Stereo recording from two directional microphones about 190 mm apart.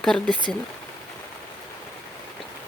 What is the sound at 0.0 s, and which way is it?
Speech, 5° left (ahead or behind).